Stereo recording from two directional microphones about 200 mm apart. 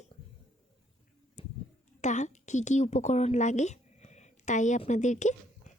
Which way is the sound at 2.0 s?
35° left (ahead or behind).